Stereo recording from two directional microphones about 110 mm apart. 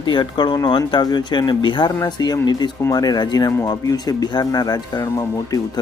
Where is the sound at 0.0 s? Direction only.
45° left (ahead or behind).